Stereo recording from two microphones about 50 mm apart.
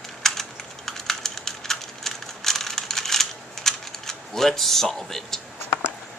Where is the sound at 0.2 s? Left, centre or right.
Centre.